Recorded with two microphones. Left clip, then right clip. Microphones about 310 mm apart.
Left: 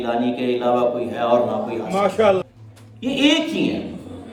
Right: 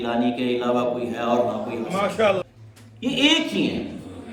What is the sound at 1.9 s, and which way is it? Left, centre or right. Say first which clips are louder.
Speech: left 4 dB; left.